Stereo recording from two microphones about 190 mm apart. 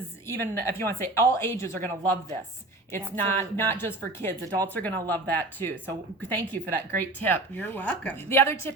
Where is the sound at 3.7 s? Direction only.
10° left (ahead or behind).